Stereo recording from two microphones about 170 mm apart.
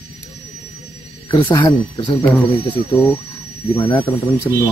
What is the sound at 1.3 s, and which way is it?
Speech, 25° left (ahead or behind).